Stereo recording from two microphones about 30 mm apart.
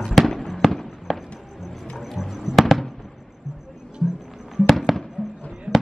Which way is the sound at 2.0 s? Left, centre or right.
Centre.